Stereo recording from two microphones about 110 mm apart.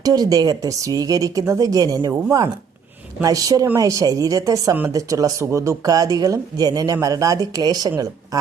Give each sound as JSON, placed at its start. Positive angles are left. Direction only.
{"t": 0.0, "sound": "speech", "side_deg": -35}
{"t": 3.2, "sound": "speech", "side_deg": -35}